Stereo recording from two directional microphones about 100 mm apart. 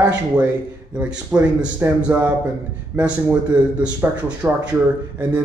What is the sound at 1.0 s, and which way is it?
Speech, 15° right (ahead or behind).